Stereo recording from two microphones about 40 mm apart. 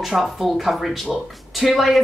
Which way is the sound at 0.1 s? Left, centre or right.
Centre.